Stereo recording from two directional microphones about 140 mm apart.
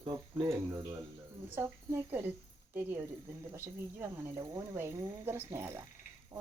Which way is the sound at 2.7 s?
15° right (ahead or behind).